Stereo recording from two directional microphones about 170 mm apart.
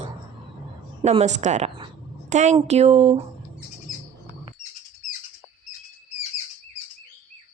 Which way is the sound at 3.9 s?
55° left (ahead or behind).